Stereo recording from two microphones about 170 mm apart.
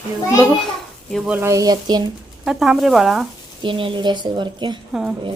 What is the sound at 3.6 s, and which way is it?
A woman's voice, 30° right (ahead or behind).